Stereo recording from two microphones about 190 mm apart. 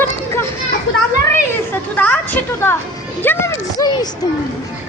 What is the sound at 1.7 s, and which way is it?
Chatter, 10° left (ahead or behind).